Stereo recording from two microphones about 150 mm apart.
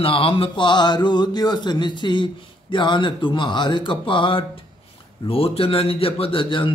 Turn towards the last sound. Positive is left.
turn(degrees=35)  # may be behind; listen again after turning